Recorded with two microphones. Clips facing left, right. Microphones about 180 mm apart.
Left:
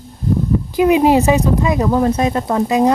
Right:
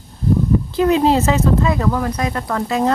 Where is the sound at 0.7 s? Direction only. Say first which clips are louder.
Left 4 dB; 15° left (ahead or behind).